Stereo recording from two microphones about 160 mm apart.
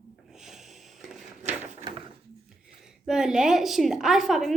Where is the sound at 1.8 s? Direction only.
30° right (ahead or behind).